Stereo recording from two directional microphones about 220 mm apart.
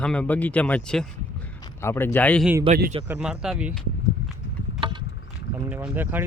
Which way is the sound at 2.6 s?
45° right (ahead or behind).